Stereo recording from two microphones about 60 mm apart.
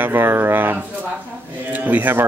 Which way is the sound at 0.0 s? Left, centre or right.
Right.